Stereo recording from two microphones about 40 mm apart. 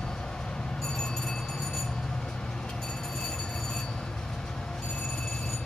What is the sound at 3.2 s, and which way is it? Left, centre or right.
Train, centre.